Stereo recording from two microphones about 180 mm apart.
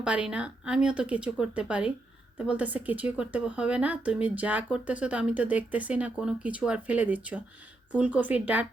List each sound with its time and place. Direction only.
0.0 s speech: 5° right (ahead or behind)